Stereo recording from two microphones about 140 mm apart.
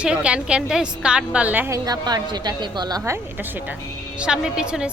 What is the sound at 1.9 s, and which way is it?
Speech, 30° right (ahead or behind).